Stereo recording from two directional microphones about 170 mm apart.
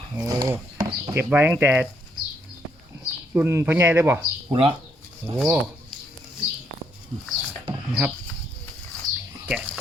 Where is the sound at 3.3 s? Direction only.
15° right (ahead or behind).